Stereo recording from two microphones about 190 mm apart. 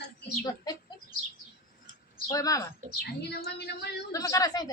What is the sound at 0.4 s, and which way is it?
Chicken, 20° left (ahead or behind).